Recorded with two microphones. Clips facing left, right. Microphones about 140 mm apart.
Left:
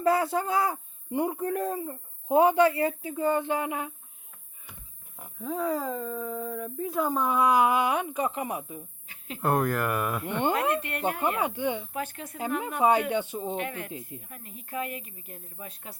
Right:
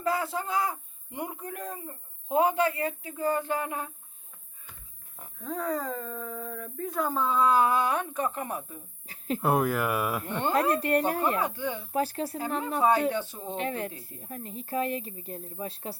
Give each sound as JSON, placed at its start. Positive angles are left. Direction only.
{"t": 0.0, "sound": "speech", "side_deg": 25}
{"t": 5.2, "sound": "speech", "side_deg": 5}
{"t": 9.0, "sound": "a sound", "side_deg": -40}
{"t": 9.4, "sound": "speech", "side_deg": -5}
{"t": 10.5, "sound": "speech", "side_deg": -40}
{"t": 11.3, "sound": "speech", "side_deg": 15}
{"t": 11.9, "sound": "speech", "side_deg": -35}
{"t": 13.1, "sound": "speech", "side_deg": 15}
{"t": 13.6, "sound": "speech", "side_deg": -35}